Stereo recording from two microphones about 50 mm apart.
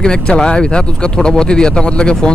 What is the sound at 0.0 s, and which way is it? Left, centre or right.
Speech, centre.